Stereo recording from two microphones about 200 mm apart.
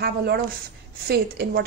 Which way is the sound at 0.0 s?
50° right (ahead or behind).